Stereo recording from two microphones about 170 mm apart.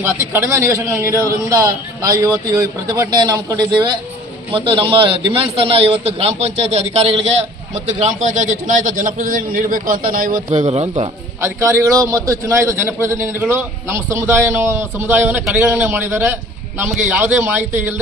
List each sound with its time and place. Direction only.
0.0 s a man's voice: 15° right (ahead or behind); by 10.4 s 55° right (ahead or behind)
10.5 s a man's voice: 40° right (ahead or behind)
11.4 s a man's voice: 15° right (ahead or behind)